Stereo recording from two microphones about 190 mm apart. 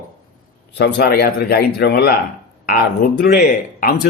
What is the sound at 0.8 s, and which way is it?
A man's voice, 65° left (ahead or behind).